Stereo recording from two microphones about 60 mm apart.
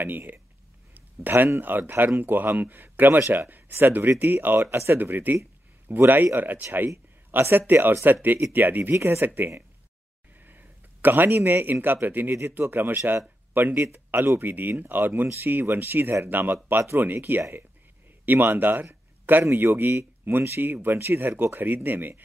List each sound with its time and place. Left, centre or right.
0.0 s speech: right
0.9 s a sound: right
1.6 s speech: right
8.9 s speech: right
9.2 s speech: right